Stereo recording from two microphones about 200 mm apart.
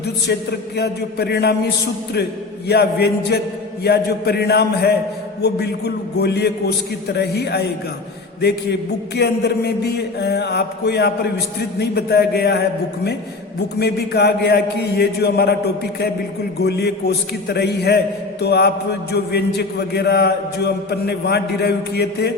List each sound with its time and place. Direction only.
0.8 s a man's voice: 55° left (ahead or behind)
9.1 s a man's voice: 55° left (ahead or behind)